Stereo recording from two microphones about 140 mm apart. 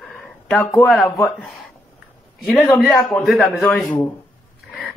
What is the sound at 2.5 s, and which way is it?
A man's voice, 5° left (ahead or behind).